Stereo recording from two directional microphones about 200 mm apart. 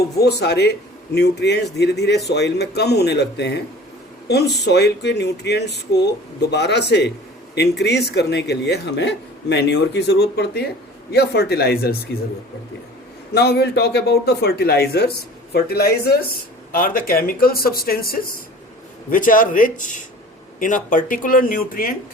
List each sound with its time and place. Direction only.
0.2 s speech: 55° left (ahead or behind)
13.3 s a man's voice: 55° left (ahead or behind)